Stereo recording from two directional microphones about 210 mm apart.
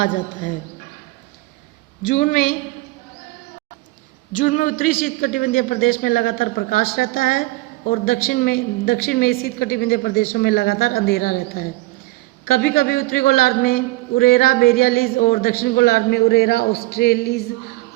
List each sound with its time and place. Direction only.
0.0 s speech: 40° left (ahead or behind)
2.0 s speech: 40° left (ahead or behind)
4.3 s a man's voice: 35° left (ahead or behind)